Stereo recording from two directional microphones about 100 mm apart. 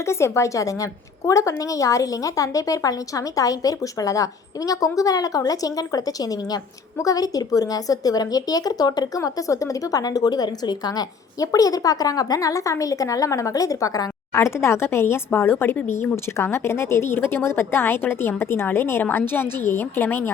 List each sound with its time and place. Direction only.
0.0 s a woman's voice: 25° left (ahead or behind)